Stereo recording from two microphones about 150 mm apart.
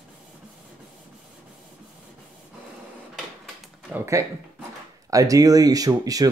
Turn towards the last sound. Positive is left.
turn(degrees=-25)  # may be behind; listen again after turning